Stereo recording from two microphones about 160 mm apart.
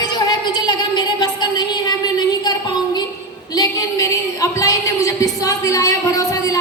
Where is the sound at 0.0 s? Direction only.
25° left (ahead or behind).